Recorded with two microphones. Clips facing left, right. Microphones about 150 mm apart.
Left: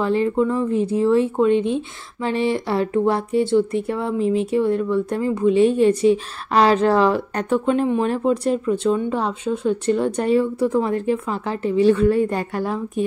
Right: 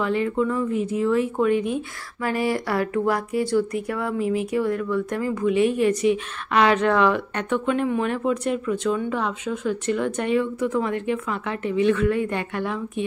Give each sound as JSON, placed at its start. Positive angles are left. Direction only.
{"t": 0.0, "sound": "speech", "side_deg": 30}